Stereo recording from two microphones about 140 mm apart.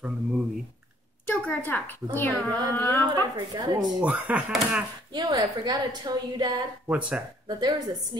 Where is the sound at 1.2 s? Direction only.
15° left (ahead or behind).